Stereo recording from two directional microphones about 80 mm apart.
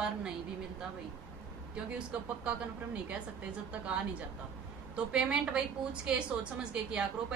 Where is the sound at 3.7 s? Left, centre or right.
Centre.